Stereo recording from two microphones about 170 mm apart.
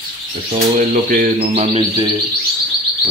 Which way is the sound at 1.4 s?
40° right (ahead or behind).